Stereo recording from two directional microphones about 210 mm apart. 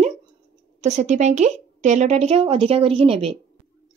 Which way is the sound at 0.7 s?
35° right (ahead or behind).